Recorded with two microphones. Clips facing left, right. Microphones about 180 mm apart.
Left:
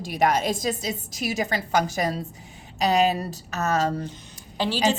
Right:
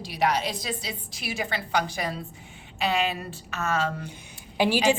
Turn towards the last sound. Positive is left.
turn(degrees=-15)  # may be behind; listen again after turning